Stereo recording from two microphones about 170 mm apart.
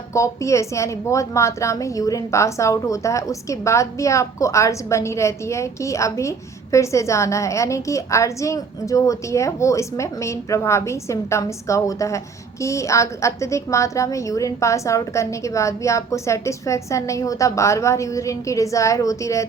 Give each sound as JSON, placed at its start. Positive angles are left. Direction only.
{"t": 0.1, "sound": "a woman's voice", "side_deg": 15}